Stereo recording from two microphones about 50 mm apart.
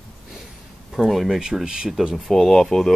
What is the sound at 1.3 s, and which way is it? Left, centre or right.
Speech, centre.